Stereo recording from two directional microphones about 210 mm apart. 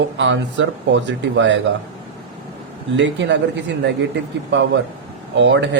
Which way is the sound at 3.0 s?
60° right (ahead or behind).